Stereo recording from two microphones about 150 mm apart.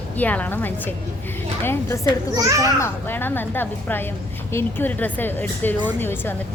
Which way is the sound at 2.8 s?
15° left (ahead or behind).